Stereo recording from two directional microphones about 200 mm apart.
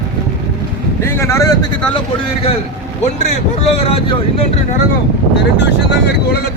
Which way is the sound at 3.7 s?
30° left (ahead or behind).